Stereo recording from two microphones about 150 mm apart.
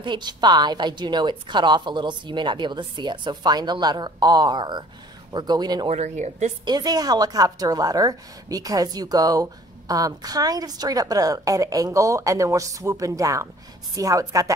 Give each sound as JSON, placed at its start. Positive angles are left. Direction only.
{"t": 0.0, "sound": "a woman's voice", "side_deg": -30}
{"t": 5.9, "sound": "speech", "side_deg": -50}
{"t": 6.6, "sound": "a woman's voice", "side_deg": -25}